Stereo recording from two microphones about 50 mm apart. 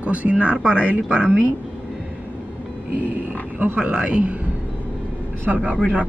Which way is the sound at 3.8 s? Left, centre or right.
Centre.